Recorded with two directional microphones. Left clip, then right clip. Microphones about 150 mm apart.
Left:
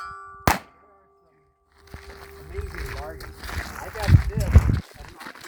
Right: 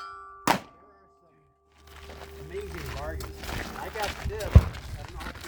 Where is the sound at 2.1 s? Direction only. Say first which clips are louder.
Right 2 dB; 20° right (ahead or behind).